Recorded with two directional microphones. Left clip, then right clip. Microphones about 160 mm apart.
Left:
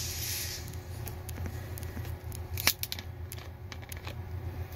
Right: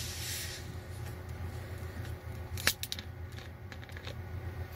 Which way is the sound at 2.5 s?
10° right (ahead or behind).